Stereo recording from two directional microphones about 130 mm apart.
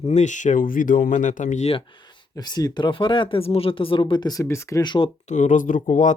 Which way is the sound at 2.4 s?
30° left (ahead or behind).